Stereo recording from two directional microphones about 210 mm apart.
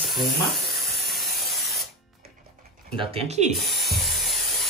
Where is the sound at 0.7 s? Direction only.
Centre (ahead or behind).